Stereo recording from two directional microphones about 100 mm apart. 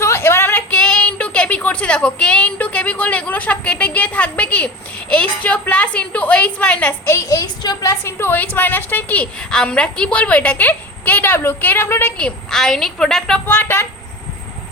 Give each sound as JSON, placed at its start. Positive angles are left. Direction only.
{"t": 0.0, "sound": "a sound", "side_deg": 25}
{"t": 0.7, "sound": "a woman's voice", "side_deg": 10}
{"t": 7.1, "sound": "a woman's voice", "side_deg": 35}
{"t": 7.9, "sound": "a woman's voice", "side_deg": 25}
{"t": 12.1, "sound": "a woman's voice", "side_deg": 5}
{"t": 13.5, "sound": "speech", "side_deg": 20}